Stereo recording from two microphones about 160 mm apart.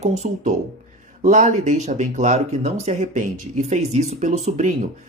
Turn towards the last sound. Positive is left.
turn(degrees=-45)  # may be behind; listen again after turning